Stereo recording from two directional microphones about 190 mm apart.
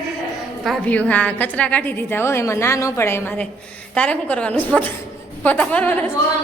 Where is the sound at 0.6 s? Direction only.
5° left (ahead or behind).